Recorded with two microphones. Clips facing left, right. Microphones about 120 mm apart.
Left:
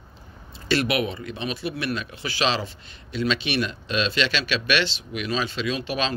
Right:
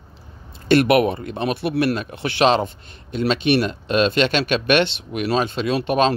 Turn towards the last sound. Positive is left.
turn(degrees=-50)  # may be behind; listen again after turning